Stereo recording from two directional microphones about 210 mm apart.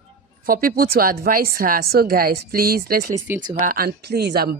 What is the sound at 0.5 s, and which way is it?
Speech, 45° right (ahead or behind).